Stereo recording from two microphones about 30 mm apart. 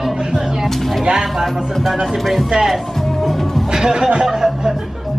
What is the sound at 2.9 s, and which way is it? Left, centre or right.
Music, centre.